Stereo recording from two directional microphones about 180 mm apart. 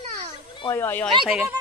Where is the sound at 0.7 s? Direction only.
10° left (ahead or behind).